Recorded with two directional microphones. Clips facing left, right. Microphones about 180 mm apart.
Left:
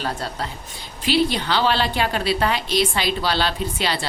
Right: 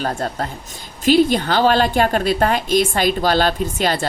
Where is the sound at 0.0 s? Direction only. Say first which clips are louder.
Right 5 dB; 45° right (ahead or behind).